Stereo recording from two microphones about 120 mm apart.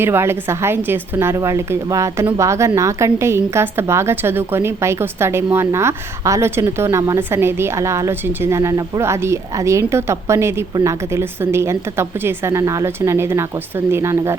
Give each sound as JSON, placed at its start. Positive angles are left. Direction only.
{"t": 0.0, "sound": "a woman's voice", "side_deg": -20}